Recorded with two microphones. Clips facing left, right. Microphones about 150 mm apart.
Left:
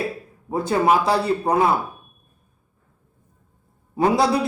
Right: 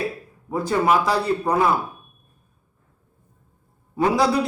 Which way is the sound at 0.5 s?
25° left (ahead or behind).